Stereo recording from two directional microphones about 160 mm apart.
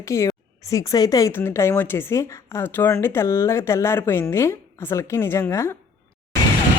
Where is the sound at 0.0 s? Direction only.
20° left (ahead or behind).